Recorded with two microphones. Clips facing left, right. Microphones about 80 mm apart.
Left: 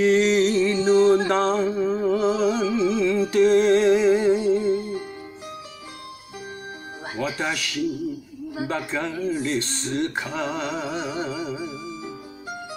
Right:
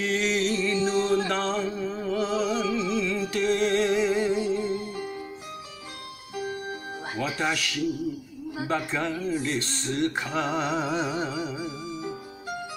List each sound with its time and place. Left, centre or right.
0.0 s music: centre
7.2 s speech: centre
10.5 s music: centre
11.1 s music: centre